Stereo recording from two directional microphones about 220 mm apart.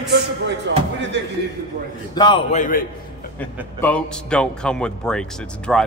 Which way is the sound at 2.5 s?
35° left (ahead or behind).